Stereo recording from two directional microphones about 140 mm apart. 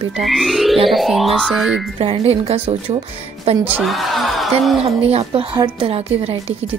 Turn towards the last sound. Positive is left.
turn(degrees=-45)  # may be behind; listen again after turning